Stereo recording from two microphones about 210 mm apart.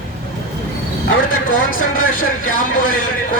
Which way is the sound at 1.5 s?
40° left (ahead or behind).